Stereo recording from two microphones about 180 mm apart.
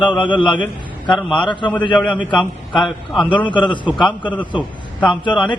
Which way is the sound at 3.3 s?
25° left (ahead or behind).